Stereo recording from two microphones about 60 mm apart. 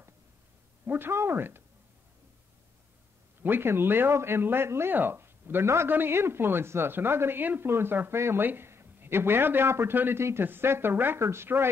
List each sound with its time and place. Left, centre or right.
0.8 s a man's voice: right
3.4 s a man's voice: right
5.9 s a man's voice: right
11.1 s speech: right